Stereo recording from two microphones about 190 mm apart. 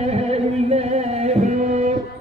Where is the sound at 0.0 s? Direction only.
35° right (ahead or behind).